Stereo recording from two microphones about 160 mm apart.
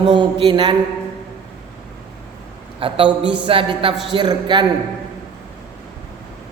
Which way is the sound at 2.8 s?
35° right (ahead or behind).